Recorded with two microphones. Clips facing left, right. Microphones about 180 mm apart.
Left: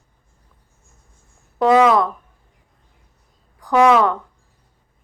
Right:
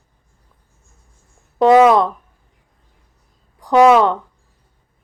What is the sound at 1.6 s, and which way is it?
Speech, 25° right (ahead or behind).